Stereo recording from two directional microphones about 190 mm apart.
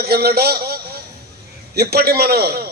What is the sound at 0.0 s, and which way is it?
A man's voice, 55° right (ahead or behind).